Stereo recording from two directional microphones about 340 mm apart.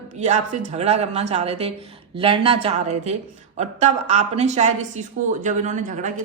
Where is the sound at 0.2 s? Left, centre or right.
Centre.